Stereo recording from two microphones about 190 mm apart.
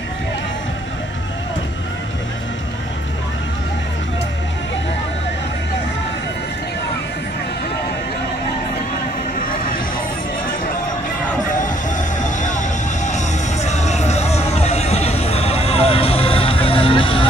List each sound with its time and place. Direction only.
12.2 s music: 40° left (ahead or behind)